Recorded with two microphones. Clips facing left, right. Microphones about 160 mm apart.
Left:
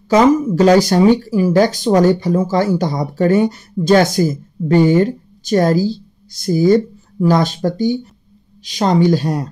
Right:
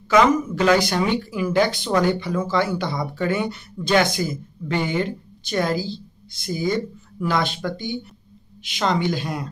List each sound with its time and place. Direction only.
0.1 s speech: 35° left (ahead or behind)